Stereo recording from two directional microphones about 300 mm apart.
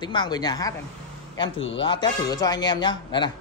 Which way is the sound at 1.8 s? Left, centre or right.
Centre.